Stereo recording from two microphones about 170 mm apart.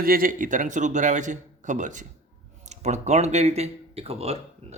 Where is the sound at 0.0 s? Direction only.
55° right (ahead or behind).